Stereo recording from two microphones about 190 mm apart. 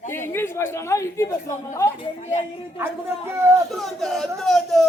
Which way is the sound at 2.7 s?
15° right (ahead or behind).